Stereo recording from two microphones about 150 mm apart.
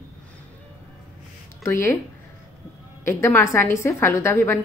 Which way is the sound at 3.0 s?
15° left (ahead or behind).